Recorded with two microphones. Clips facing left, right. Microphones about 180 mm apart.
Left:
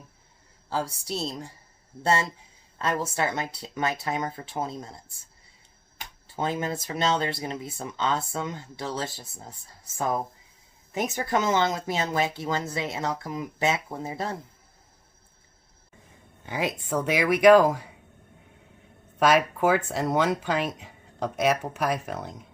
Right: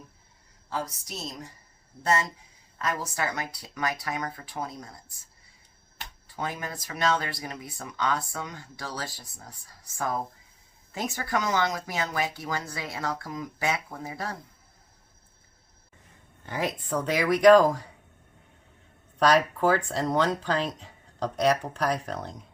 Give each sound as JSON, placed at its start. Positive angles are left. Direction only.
{"t": 0.7, "sound": "speech", "side_deg": 30}
{"t": 2.7, "sound": "speech", "side_deg": 25}
{"t": 6.2, "sound": "speech", "side_deg": 25}
{"t": 16.5, "sound": "speech", "side_deg": 20}
{"t": 17.4, "sound": "speech", "side_deg": 5}
{"t": 19.2, "sound": "speech", "side_deg": 10}